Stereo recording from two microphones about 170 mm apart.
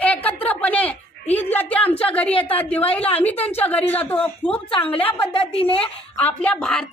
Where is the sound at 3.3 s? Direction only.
35° left (ahead or behind).